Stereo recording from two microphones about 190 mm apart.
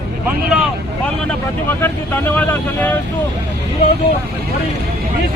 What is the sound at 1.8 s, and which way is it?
Speech, 10° left (ahead or behind).